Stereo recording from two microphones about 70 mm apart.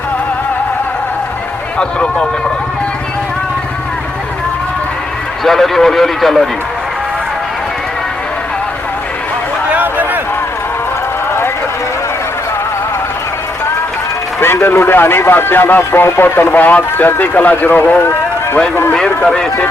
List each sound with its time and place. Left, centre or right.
1.8 s speech: centre
5.4 s a man's voice: centre
9.6 s a sound: right
14.4 s speech: left
18.0 s run: left
18.9 s speech: centre